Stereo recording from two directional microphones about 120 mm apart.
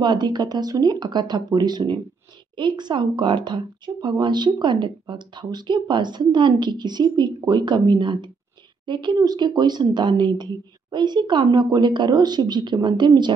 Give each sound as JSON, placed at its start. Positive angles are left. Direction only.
{"t": 0.0, "sound": "a woman's voice", "side_deg": -40}